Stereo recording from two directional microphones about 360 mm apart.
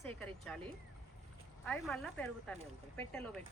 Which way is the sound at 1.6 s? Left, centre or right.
Centre.